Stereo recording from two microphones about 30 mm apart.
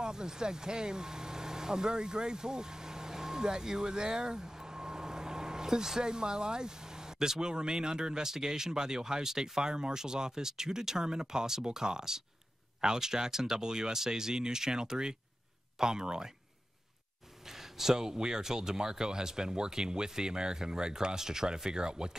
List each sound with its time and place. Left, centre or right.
0.0 s speech: right
17.5 s a sound: centre
17.9 s speech: right